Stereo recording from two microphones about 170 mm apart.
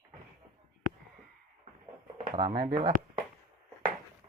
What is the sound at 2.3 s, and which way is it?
Speech, 30° right (ahead or behind).